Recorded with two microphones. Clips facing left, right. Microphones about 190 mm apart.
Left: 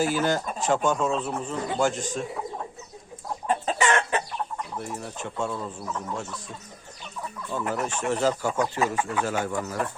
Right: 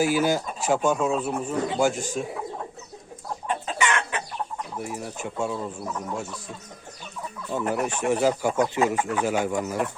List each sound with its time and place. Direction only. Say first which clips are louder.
0.0 s speech: right 2 dB; 10° right (ahead or behind)
3.4 s chicken: left 2 dB; 40° left (ahead or behind)
4.8 s speech: right 2 dB; 10° right (ahead or behind)
7.7 s speech: right 3 dB; 15° right (ahead or behind)